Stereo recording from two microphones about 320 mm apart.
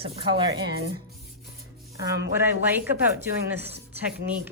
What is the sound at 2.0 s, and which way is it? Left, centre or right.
Speech, centre.